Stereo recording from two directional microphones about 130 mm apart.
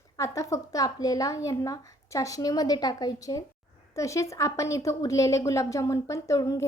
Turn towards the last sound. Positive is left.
turn(degrees=25)  # may be behind; listen again after turning